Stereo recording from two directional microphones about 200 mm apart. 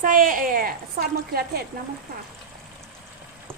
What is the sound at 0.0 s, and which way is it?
A woman's voice, 40° right (ahead or behind).